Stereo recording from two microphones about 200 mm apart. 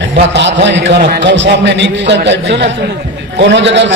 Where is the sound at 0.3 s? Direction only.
60° right (ahead or behind).